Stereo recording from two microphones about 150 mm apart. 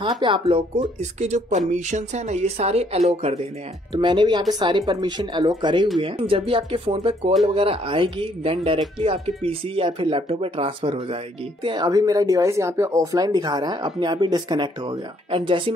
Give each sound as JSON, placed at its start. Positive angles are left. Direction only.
{"t": 0.5, "sound": "speech", "side_deg": -40}
{"t": 3.9, "sound": "speech", "side_deg": -35}